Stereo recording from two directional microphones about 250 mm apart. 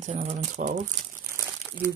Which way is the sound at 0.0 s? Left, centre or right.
Right.